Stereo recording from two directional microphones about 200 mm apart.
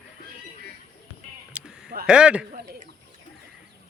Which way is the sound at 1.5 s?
5° right (ahead or behind).